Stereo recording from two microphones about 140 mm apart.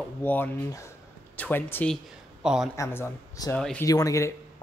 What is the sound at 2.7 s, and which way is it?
Speech, 20° left (ahead or behind).